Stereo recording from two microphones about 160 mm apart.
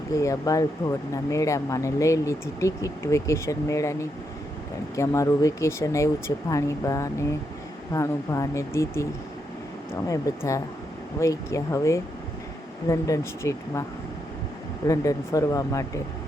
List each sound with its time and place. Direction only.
0.2 s speech: 20° left (ahead or behind)
4.9 s speech: 20° left (ahead or behind)
14.8 s speech: 20° left (ahead or behind)